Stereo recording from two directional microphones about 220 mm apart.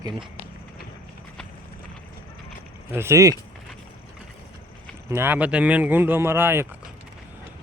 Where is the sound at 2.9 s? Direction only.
10° right (ahead or behind).